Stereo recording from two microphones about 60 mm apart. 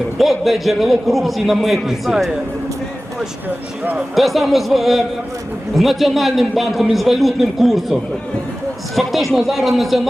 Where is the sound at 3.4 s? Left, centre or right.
Right.